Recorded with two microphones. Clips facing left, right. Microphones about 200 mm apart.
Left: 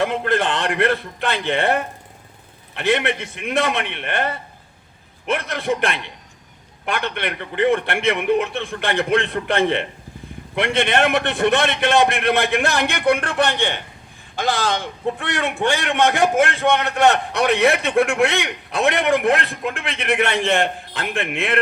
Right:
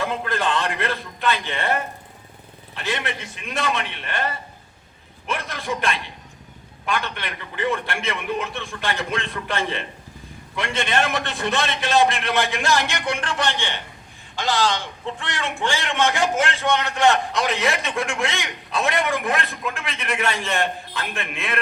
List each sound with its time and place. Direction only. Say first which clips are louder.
0.0 s a man's voice: left 5 dB; 70° left (ahead or behind)